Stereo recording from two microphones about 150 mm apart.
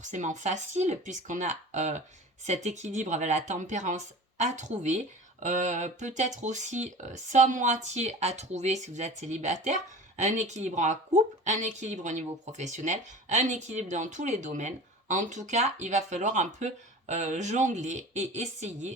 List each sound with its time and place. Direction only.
0.0 s speech: 55° right (ahead or behind)